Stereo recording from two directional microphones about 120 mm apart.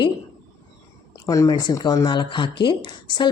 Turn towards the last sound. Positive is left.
turn(degrees=40)  # may be behind; listen again after turning